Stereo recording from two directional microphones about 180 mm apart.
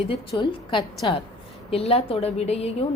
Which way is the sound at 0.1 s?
25° left (ahead or behind).